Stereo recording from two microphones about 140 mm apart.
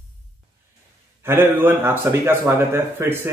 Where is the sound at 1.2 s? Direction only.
15° right (ahead or behind).